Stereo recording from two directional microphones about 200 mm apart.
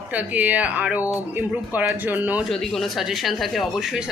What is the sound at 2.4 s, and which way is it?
Speech, centre (ahead or behind).